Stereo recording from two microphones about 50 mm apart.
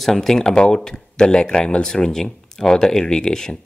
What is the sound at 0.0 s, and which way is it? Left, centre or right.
Speech, centre.